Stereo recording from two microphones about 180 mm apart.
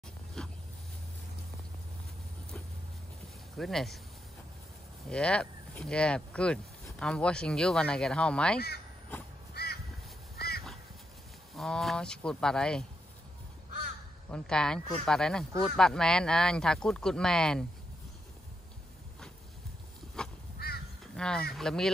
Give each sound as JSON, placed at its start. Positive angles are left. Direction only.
{"t": 0.4, "sound": "vehicle", "side_deg": 5}
{"t": 3.5, "sound": "speech", "side_deg": 0}
{"t": 5.1, "sound": "speech", "side_deg": 5}
{"t": 8.5, "sound": "speech", "side_deg": 60}
{"t": 9.5, "sound": "crow", "side_deg": 60}
{"t": 10.3, "sound": "duck", "side_deg": 60}
{"t": 11.5, "sound": "speech", "side_deg": 0}
{"t": 14.3, "sound": "speech", "side_deg": 5}
{"t": 20.5, "sound": "crow", "side_deg": 60}
{"t": 21.2, "sound": "speech", "side_deg": 5}